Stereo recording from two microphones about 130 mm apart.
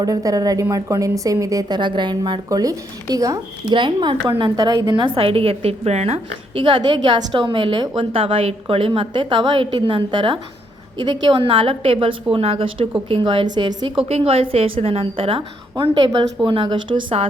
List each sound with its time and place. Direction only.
0.0 s a woman's voice: 30° right (ahead or behind)
3.8 s a woman's voice: 40° right (ahead or behind)
14.1 s a woman's voice: 50° right (ahead or behind)